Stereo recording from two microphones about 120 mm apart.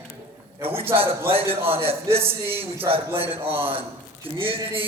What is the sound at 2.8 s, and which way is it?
Speech, 50° right (ahead or behind).